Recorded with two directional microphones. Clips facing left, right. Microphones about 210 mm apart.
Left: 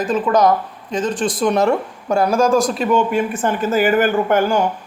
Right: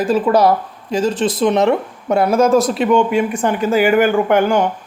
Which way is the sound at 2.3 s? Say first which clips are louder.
Right 3 dB; 5° right (ahead or behind).